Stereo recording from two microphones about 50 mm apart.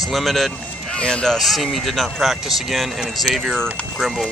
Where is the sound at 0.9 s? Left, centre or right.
Left.